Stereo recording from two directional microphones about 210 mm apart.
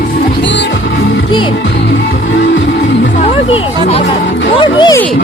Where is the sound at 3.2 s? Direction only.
30° left (ahead or behind).